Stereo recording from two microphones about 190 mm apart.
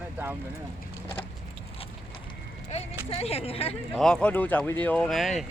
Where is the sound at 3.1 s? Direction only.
30° left (ahead or behind).